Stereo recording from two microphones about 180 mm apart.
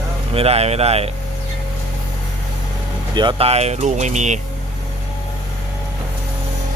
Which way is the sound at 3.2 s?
30° right (ahead or behind).